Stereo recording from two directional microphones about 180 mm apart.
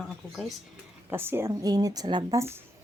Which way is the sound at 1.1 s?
15° right (ahead or behind).